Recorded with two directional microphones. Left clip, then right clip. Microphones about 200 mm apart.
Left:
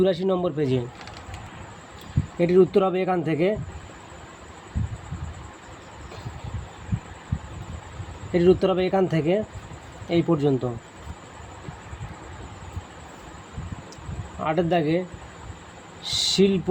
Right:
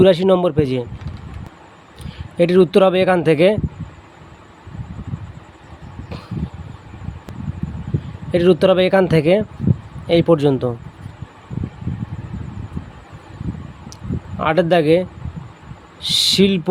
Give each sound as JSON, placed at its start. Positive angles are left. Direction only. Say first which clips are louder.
{"t": 0.0, "sound": "a man's voice", "louder": "right 10 dB", "side_deg": -35}
{"t": 2.4, "sound": "speech", "louder": "right 6 dB", "side_deg": -45}
{"t": 8.3, "sound": "speech", "louder": "right 6 dB", "side_deg": -40}
{"t": 14.4, "sound": "a man's voice", "louder": "right 8 dB", "side_deg": -40}